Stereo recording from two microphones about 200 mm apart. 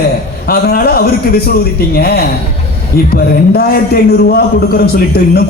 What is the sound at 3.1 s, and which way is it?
Speech, 50° left (ahead or behind).